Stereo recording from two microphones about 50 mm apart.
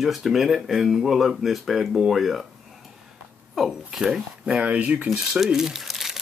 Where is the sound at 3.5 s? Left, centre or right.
Centre.